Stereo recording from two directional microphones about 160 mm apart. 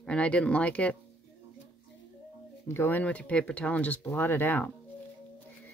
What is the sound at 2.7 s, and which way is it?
Speech, 15° left (ahead or behind).